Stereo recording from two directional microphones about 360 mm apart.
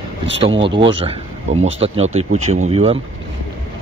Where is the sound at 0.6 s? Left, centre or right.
Centre.